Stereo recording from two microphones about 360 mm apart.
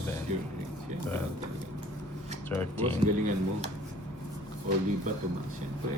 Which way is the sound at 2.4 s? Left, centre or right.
Centre.